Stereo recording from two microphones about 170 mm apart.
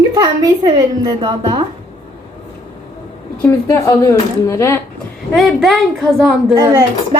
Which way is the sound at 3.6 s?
20° left (ahead or behind).